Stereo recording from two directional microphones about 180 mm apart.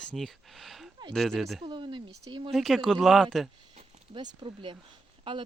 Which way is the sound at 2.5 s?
Centre (ahead or behind).